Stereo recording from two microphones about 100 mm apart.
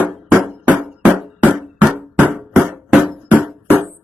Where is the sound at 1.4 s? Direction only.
15° right (ahead or behind).